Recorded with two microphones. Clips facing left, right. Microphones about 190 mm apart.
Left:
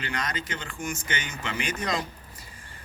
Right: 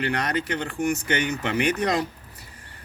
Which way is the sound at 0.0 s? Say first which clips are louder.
Right 7 dB; 65° right (ahead or behind).